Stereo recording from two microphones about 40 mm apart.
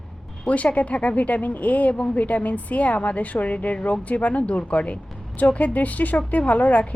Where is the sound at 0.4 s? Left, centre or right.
Left.